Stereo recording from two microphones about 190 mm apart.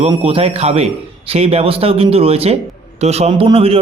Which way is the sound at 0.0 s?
30° right (ahead or behind).